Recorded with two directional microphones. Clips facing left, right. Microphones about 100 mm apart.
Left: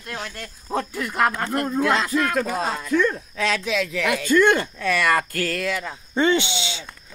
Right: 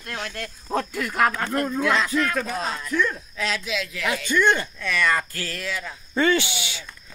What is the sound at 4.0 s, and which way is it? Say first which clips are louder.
Speech: left 4 dB; 70° left (ahead or behind).